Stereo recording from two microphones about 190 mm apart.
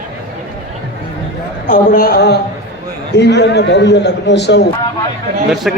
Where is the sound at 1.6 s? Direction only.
50° left (ahead or behind); by 4.6 s 65° left (ahead or behind).